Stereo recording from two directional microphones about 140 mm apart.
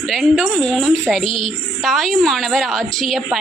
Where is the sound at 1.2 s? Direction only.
40° left (ahead or behind).